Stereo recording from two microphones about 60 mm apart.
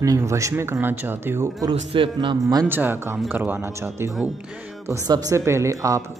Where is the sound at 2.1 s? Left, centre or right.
Right.